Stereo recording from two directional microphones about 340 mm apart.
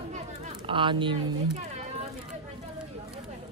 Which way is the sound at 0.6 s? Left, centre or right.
Centre.